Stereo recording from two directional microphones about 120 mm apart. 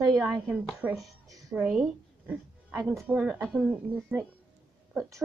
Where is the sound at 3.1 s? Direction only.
10° right (ahead or behind).